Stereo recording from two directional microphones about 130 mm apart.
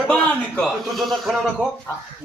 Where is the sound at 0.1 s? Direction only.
5° left (ahead or behind).